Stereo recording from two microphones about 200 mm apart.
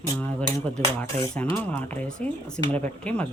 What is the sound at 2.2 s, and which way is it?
Speech, 30° right (ahead or behind).